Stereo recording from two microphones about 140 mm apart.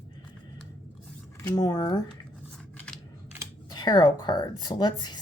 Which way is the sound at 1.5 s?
30° left (ahead or behind).